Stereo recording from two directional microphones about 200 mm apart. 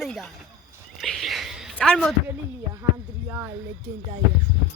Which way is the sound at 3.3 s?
15° right (ahead or behind).